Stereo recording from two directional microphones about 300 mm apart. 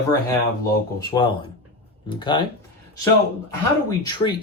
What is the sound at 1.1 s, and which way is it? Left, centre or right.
Speech, centre.